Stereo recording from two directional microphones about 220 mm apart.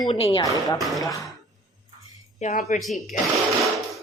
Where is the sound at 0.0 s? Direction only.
25° left (ahead or behind).